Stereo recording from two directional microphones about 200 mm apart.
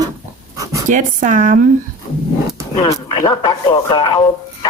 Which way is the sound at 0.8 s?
40° right (ahead or behind).